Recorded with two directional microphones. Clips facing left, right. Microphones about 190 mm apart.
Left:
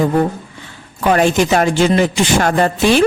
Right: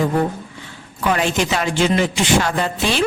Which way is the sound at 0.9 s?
45° left (ahead or behind).